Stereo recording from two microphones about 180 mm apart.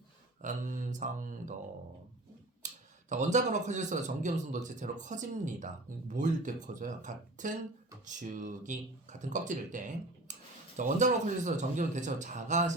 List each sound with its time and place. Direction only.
0.4 s speech: 45° right (ahead or behind)
2.6 s speech: 40° right (ahead or behind)